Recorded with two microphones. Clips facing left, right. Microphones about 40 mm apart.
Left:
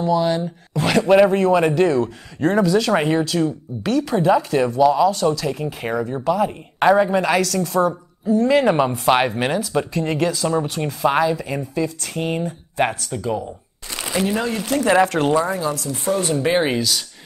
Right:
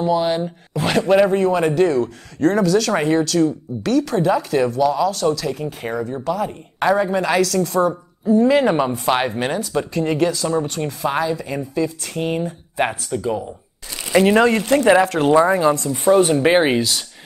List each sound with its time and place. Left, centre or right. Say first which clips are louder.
0.0 s speech: even; centre
0.7 s speech: left 1 dB; centre
14.2 s speech: right 8 dB; right
15.0 s speech: right 1 dB; centre
15.5 s speech: right 6 dB; right